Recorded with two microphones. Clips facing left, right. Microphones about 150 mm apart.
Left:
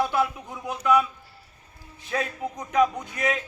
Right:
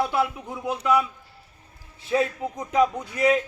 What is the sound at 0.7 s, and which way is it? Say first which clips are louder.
Speech: left 1 dB; 25° right (ahead or behind).